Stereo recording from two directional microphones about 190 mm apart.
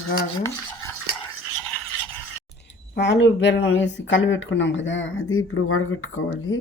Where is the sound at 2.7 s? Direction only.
65° left (ahead or behind); by 6.6 s 90° left.